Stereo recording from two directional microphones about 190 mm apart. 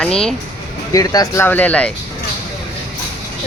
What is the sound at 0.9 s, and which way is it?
Speech, 20° left (ahead or behind).